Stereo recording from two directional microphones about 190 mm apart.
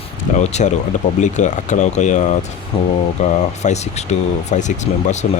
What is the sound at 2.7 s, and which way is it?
Speech, 30° left (ahead or behind).